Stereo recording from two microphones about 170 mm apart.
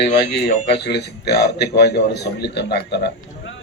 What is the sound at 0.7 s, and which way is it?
A man's voice, 75° left (ahead or behind).